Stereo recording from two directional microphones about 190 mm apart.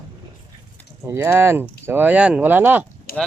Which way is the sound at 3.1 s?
50° left (ahead or behind).